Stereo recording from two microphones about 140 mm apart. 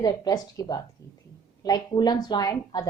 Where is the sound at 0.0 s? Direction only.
25° left (ahead or behind).